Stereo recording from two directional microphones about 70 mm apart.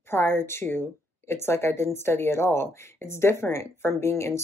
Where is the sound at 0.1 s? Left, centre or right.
Left.